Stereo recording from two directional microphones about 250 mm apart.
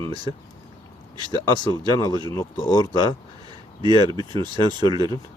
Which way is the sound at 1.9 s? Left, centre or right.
Centre.